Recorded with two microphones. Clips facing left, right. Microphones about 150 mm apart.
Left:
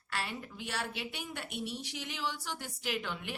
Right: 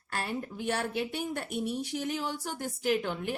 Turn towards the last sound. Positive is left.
turn(degrees=-45)  # may be behind; listen again after turning